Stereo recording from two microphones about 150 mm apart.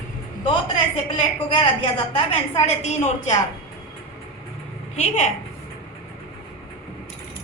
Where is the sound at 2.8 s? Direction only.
50° left (ahead or behind).